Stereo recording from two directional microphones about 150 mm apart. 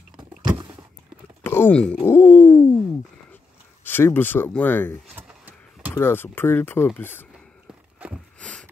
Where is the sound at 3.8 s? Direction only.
15° left (ahead or behind).